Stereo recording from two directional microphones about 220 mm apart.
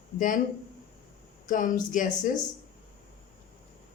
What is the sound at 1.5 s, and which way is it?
Speech, 35° left (ahead or behind).